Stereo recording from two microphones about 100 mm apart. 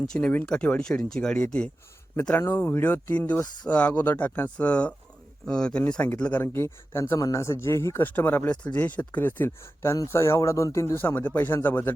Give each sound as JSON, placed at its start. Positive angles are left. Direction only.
{"t": 0.1, "sound": "speech", "side_deg": 10}
{"t": 2.4, "sound": "speech", "side_deg": 20}